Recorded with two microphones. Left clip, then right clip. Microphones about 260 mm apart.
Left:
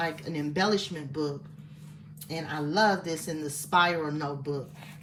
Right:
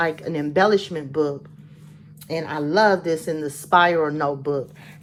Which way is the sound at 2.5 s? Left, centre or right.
Centre.